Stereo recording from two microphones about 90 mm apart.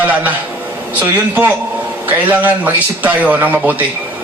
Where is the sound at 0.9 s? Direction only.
20° right (ahead or behind).